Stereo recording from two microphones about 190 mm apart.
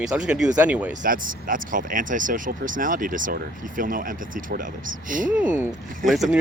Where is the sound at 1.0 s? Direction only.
45° right (ahead or behind).